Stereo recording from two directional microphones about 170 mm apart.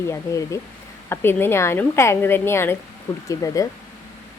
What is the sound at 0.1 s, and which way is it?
A woman's voice, 20° left (ahead or behind).